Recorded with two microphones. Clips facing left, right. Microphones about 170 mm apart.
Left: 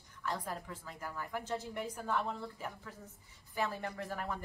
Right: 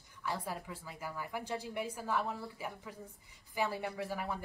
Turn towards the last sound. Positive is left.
turn(degrees=-10)  # may be behind; listen again after turning